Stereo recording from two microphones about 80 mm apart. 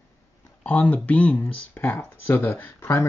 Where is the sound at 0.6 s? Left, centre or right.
Centre.